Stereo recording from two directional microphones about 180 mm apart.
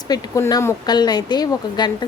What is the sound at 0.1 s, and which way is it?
A woman's voice, 20° left (ahead or behind).